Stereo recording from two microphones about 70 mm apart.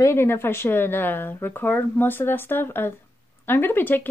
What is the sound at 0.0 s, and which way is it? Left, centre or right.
Speech, left.